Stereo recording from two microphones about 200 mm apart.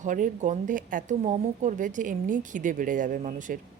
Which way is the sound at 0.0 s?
40° right (ahead or behind).